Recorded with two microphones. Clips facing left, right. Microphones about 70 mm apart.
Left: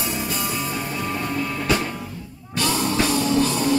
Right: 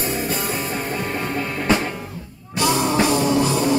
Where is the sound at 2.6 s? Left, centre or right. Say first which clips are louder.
Right 3 dB; right.